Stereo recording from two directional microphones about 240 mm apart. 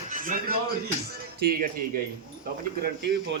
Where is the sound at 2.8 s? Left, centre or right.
Right.